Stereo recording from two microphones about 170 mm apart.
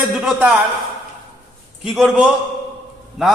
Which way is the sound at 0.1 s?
5° right (ahead or behind).